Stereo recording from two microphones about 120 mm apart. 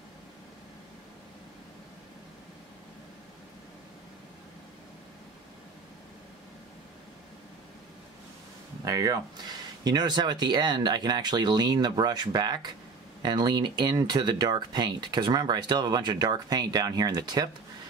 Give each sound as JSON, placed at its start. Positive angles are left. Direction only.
{"t": 8.8, "sound": "speech", "side_deg": -30}